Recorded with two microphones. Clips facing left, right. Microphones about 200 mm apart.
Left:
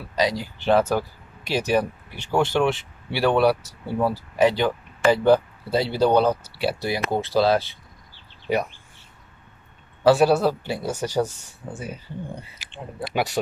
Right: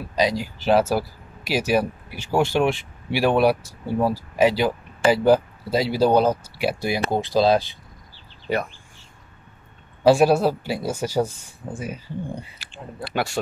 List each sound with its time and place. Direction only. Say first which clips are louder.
0.2 s speech: right 1 dB; 10° right (ahead or behind)
10.0 s speech: right 1 dB; 10° right (ahead or behind)
13.1 s a man's voice: even; 20° left (ahead or behind)